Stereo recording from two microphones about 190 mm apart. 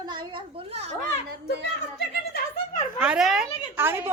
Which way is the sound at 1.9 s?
55° left (ahead or behind).